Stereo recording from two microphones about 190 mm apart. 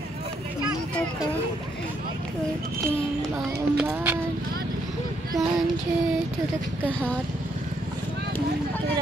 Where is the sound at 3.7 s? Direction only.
5° right (ahead or behind).